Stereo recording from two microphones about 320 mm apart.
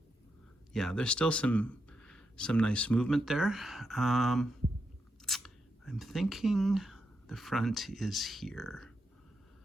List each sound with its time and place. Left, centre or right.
0.7 s speech: centre